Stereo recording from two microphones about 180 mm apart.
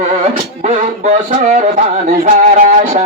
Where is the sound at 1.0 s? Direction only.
40° right (ahead or behind).